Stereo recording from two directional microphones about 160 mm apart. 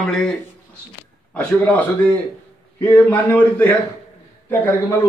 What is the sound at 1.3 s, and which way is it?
A man's voice, 10° left (ahead or behind).